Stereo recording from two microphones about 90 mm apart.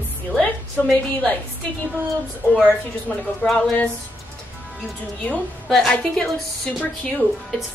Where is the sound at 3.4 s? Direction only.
5° left (ahead or behind).